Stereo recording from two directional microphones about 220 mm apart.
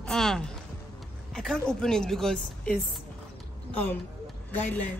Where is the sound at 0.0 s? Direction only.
Centre (ahead or behind).